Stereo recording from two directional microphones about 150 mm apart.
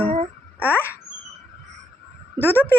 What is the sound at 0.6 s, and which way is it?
Speech, 15° left (ahead or behind).